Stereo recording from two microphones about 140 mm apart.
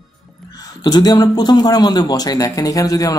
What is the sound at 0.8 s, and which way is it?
Speech, 30° left (ahead or behind).